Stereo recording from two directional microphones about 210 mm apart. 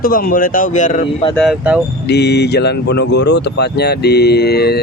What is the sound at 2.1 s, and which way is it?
Speech, 50° left (ahead or behind).